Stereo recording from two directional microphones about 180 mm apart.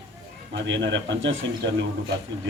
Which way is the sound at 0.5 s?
85° right.